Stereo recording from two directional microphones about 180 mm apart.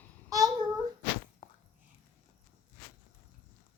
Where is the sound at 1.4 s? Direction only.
25° left (ahead or behind).